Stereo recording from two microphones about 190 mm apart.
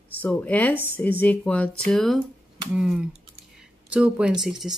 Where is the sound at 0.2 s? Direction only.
10° left (ahead or behind).